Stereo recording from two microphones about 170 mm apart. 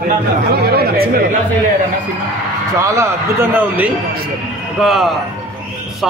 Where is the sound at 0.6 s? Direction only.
65° right (ahead or behind).